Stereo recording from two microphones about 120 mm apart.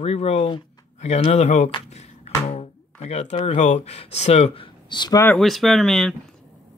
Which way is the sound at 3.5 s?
70° left (ahead or behind).